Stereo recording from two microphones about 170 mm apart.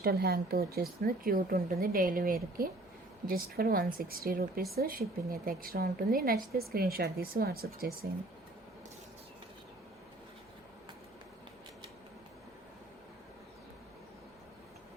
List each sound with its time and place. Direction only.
0.0 s a woman's voice: 65° right (ahead or behind)